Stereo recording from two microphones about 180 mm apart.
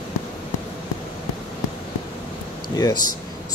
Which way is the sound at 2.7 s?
20° left (ahead or behind).